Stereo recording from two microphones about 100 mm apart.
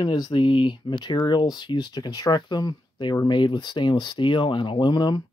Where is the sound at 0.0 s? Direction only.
40° left (ahead or behind).